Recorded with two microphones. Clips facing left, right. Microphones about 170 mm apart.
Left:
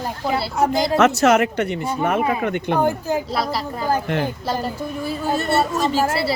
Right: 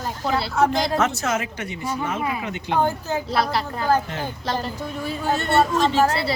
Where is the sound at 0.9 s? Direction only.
75° left (ahead or behind); by 2.7 s 55° left (ahead or behind).